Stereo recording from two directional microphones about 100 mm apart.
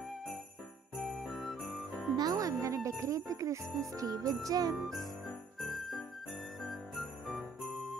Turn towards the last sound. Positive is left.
turn(degrees=0)  # may be behind; listen again after turning